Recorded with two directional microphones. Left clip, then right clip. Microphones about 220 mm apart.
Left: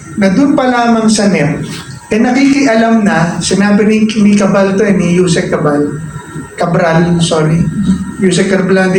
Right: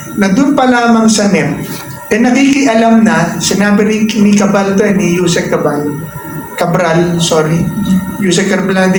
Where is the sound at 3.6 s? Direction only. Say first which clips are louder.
Left 1 dB; 45° right (ahead or behind).